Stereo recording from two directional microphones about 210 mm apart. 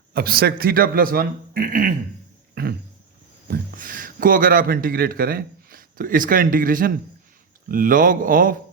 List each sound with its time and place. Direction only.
0.1 s a man's voice: 50° right (ahead or behind)
2.6 s roaring cats: 45° right (ahead or behind)
3.5 s a man's voice: 40° right (ahead or behind)